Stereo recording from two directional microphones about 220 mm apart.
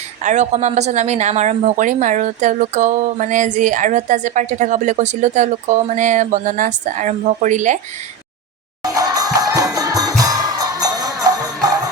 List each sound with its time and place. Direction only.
0.2 s speech: 35° right (ahead or behind)
8.8 s music: 15° right (ahead or behind)